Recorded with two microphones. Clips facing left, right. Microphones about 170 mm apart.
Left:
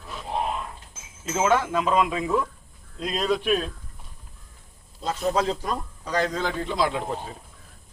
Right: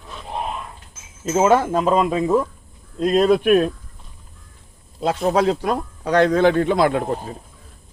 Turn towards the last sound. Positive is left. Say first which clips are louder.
# right 7 dB
turn(degrees=-55)  # may be behind; listen again after turning